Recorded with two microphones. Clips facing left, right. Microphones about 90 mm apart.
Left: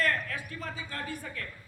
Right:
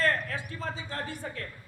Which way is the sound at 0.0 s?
30° right (ahead or behind).